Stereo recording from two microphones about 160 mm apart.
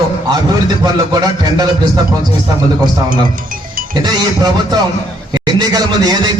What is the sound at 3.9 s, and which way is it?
A man's voice, 25° right (ahead or behind).